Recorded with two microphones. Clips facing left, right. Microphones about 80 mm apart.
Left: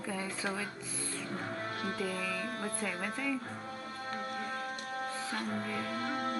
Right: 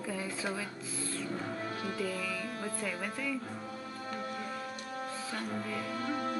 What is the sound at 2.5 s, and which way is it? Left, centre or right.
Speech, left.